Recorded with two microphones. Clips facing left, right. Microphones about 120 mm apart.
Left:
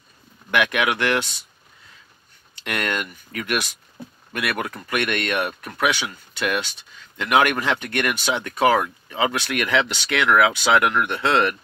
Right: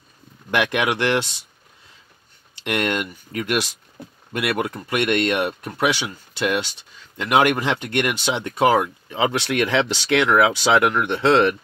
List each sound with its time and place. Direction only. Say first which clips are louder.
0.5 s speech: even; 30° right (ahead or behind)
2.5 s speech: right 3 dB; 25° right (ahead or behind)